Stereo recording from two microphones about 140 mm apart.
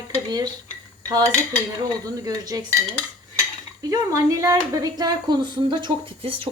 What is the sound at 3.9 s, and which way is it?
Speech, 25° right (ahead or behind).